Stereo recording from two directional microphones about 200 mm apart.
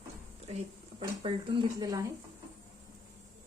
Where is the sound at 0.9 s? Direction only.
25° right (ahead or behind).